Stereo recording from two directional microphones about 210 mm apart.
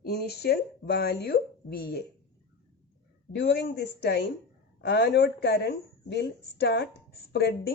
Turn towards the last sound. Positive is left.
turn(degrees=50)  # may be behind; listen again after turning